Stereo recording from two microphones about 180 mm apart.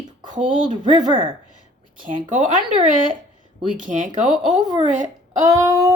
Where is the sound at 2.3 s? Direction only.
45° right (ahead or behind).